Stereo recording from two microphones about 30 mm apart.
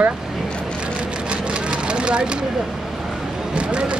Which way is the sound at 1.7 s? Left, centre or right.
Right.